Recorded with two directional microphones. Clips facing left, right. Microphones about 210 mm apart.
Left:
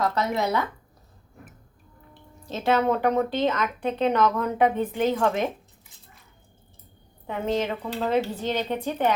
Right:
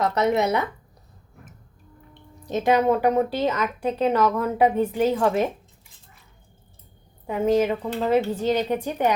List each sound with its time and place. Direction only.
0.0 s speech: 20° right (ahead or behind)
2.5 s speech: 15° right (ahead or behind)
7.3 s speech: 10° right (ahead or behind)